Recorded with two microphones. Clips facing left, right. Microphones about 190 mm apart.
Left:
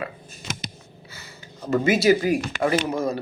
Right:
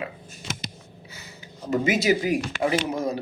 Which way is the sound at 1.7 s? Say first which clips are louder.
Left 3 dB; 15° right (ahead or behind).